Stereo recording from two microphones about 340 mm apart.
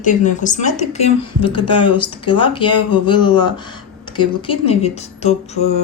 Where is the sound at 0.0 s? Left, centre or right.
Left.